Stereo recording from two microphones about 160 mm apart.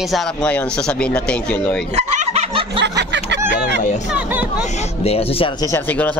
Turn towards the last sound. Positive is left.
turn(degrees=40)  # may be behind; listen again after turning